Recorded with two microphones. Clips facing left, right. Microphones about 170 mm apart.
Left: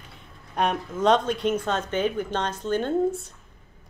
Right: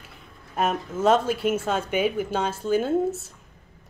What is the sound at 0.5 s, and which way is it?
Speech, 5° right (ahead or behind).